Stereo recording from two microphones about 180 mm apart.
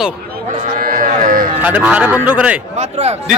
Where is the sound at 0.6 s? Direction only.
50° right (ahead or behind).